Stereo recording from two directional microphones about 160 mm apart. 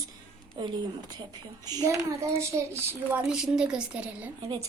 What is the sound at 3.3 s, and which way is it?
A woman's voice, 5° right (ahead or behind).